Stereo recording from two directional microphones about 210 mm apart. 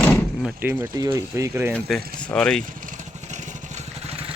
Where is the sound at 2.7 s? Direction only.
40° right (ahead or behind).